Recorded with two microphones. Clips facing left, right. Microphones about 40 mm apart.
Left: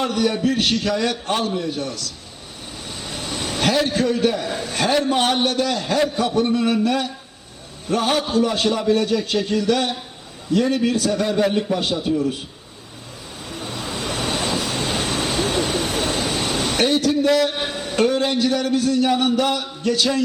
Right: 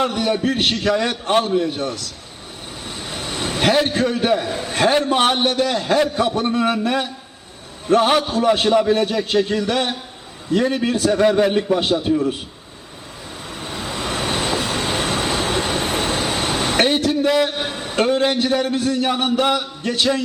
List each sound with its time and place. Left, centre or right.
0.0 s a man's voice: right
2.8 s vehicle: right
3.8 s a man's voice: right
13.5 s vehicle: right
17.2 s a man's voice: right
17.7 s a man's voice: right